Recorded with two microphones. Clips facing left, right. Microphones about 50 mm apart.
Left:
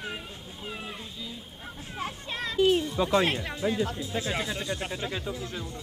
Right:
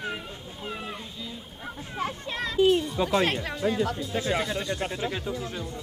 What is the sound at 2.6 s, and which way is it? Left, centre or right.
Speech, centre.